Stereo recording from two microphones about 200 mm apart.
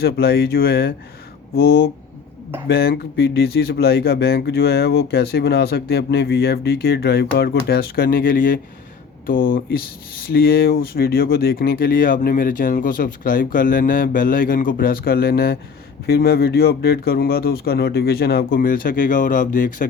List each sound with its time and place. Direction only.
0.0 s speech: 50° left (ahead or behind)